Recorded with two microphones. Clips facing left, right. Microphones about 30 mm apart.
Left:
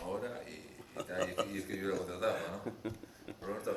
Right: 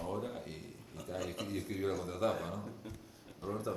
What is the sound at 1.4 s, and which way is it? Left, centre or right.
Speech, left.